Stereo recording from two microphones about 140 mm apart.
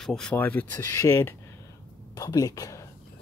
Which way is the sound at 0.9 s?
25° left (ahead or behind).